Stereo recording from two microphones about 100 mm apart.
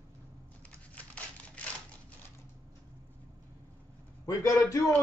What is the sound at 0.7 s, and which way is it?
Crumpling, 15° left (ahead or behind).